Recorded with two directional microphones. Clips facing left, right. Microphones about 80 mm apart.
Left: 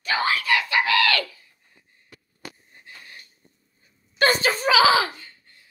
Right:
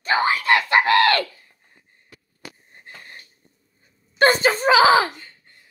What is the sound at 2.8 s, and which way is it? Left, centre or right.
Wheeze, right.